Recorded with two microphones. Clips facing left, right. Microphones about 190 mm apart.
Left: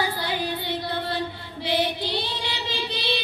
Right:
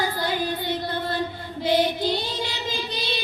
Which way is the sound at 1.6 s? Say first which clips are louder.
Right 4 dB; 45° right (ahead or behind).